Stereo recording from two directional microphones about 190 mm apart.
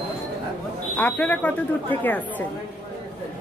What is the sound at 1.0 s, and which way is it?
Speech, 10° left (ahead or behind).